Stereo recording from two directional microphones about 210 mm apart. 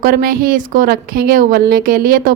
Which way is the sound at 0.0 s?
40° right (ahead or behind).